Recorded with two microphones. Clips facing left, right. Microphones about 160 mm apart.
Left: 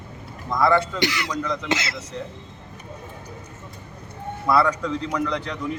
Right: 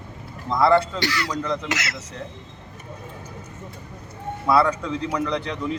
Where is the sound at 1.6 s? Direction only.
25° left (ahead or behind).